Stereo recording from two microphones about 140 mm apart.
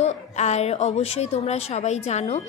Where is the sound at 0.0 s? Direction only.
50° left (ahead or behind).